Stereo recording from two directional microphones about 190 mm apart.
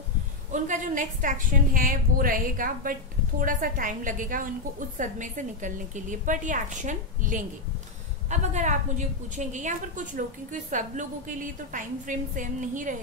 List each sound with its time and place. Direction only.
0.5 s a woman's voice: 40° right (ahead or behind)